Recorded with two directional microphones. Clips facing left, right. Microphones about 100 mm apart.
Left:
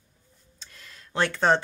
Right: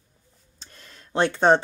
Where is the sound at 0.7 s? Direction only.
30° right (ahead or behind).